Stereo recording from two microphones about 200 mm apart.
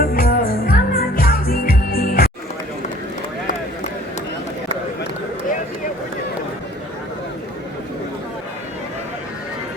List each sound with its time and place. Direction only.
0.0 s music: 45° left (ahead or behind)